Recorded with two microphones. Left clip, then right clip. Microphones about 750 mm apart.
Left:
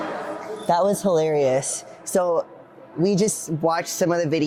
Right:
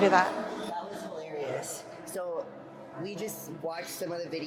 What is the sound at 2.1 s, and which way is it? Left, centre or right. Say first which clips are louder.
Speech: left 15 dB; left.